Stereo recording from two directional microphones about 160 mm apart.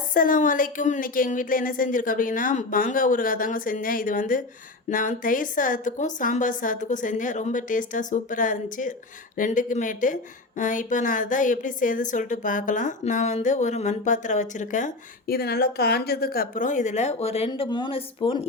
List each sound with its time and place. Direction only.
0.1 s a woman's voice: 60° left (ahead or behind)
15.4 s speech: 80° left; by 17.5 s 40° left (ahead or behind)
17.5 s a woman's voice: 30° left (ahead or behind)